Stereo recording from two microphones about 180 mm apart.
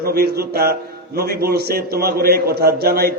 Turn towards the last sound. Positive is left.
turn(degrees=-60)  # may be behind; listen again after turning